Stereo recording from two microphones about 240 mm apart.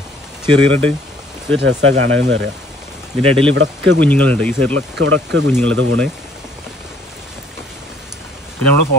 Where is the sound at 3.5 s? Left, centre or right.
Right.